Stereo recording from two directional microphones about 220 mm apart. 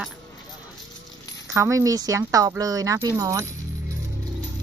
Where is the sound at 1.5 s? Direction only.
15° right (ahead or behind).